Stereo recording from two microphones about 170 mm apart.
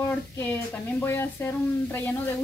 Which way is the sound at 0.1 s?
10° left (ahead or behind).